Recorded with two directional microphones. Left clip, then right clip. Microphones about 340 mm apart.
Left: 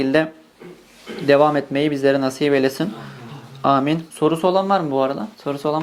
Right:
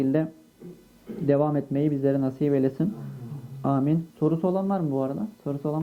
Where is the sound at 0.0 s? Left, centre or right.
Centre.